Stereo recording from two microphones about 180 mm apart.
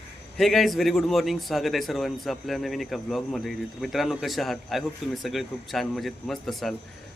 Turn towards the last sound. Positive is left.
turn(degrees=0)  # may be behind; listen again after turning